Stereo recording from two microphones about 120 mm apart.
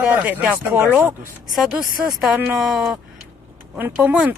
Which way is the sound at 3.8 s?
15° right (ahead or behind).